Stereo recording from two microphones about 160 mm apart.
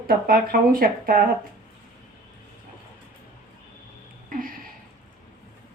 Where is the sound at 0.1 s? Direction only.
65° right (ahead or behind).